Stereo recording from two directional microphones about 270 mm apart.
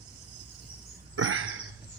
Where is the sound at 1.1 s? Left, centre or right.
Right.